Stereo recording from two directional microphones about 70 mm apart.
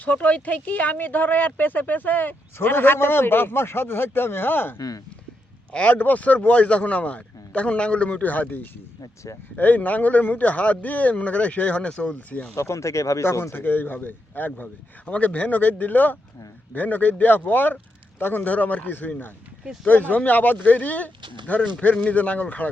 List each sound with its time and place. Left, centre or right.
0.0 s speech: left
4.8 s speech: left
5.7 s speech: centre
9.0 s speech: left
9.6 s speech: left
12.5 s speech: left
13.2 s speech: left